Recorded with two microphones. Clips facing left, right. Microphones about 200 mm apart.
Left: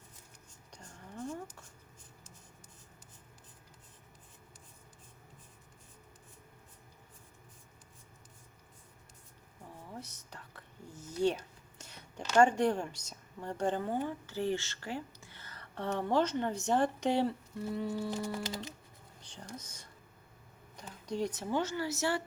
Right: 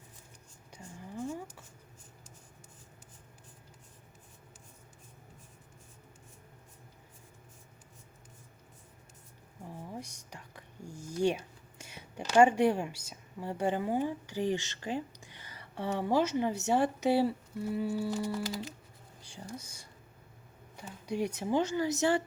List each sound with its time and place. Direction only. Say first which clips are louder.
0.7 s a sound: right 5 dB; 10° right (ahead or behind)
9.9 s whispering: right 3 dB; 15° right (ahead or behind)
12.3 s a woman's voice: right 3 dB; 10° right (ahead or behind)
19.2 s speech: right 3 dB; 10° right (ahead or behind)